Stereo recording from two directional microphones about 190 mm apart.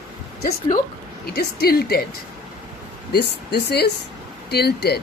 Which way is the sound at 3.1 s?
60° left (ahead or behind).